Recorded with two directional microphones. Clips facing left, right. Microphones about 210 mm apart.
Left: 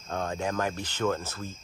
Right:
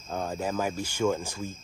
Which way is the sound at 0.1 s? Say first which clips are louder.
Even; 5° right (ahead or behind).